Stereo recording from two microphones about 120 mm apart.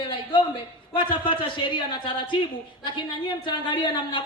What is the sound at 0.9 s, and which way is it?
A man's voice, 45° left (ahead or behind).